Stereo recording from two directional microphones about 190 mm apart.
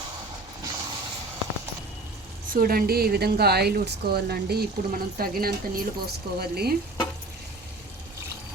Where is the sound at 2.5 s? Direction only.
50° right (ahead or behind).